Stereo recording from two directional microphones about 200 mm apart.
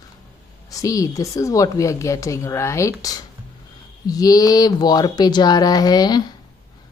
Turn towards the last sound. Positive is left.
turn(degrees=20)  # may be behind; listen again after turning